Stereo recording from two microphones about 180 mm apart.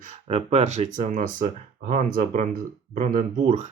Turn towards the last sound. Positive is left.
turn(degrees=-40)  # may be behind; listen again after turning